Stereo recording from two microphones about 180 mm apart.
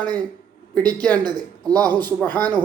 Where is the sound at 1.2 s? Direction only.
25° right (ahead or behind).